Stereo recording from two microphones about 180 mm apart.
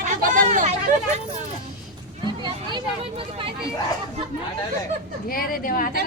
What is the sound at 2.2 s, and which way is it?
Speech, 25° right (ahead or behind).